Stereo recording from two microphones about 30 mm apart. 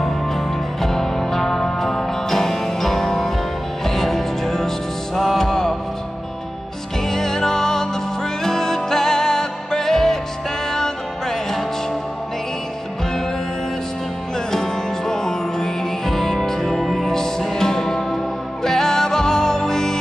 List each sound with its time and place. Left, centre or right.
0.7 s music: centre
7.1 s music: centre
14.5 s music: centre
17.6 s music: centre